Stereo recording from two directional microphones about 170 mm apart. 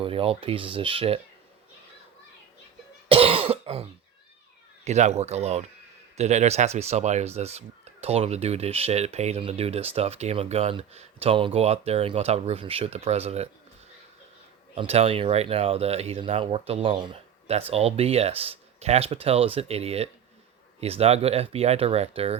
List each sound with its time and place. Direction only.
0.0 s speech: 35° right (ahead or behind)
3.1 s cough: 35° right (ahead or behind)
4.9 s speech: 40° right (ahead or behind)
14.8 s speech: 35° right (ahead or behind)